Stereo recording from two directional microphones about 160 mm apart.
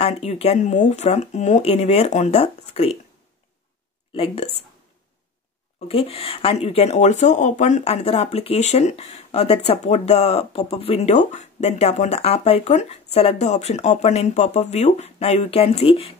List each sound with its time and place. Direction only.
0.0 s speech: 40° left (ahead or behind)
4.1 s speech: 35° left (ahead or behind)
5.9 s speech: 35° left (ahead or behind)